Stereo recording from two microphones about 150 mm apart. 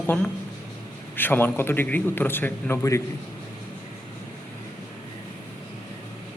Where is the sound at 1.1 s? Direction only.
15° left (ahead or behind).